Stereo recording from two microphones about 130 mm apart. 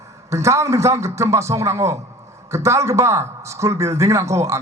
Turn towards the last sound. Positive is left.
turn(degrees=-25)  # may be behind; listen again after turning